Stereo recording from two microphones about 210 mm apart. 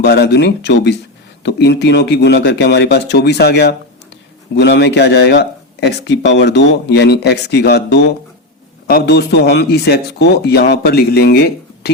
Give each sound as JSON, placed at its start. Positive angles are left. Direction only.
{"t": 0.0, "sound": "speech", "side_deg": 50}